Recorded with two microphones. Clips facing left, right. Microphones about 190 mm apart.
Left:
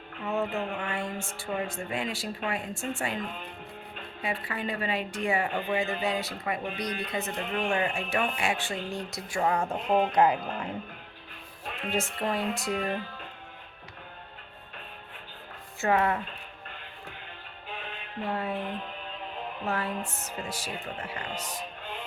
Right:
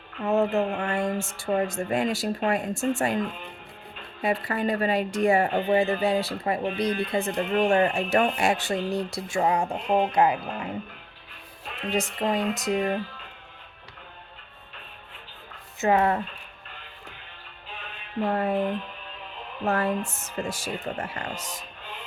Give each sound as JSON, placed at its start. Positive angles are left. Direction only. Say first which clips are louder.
{"t": 0.3, "sound": "speech", "louder": "right 7 dB", "side_deg": -45}
{"t": 4.2, "sound": "a woman's voice", "louder": "right 7 dB", "side_deg": -40}
{"t": 11.9, "sound": "music", "louder": "right 4 dB", "side_deg": -15}
{"t": 15.8, "sound": "music", "louder": "right 4 dB", "side_deg": -25}
{"t": 18.3, "sound": "speech", "louder": "right 6 dB", "side_deg": -50}
{"t": 19.6, "sound": "speech", "louder": "right 7 dB", "side_deg": -45}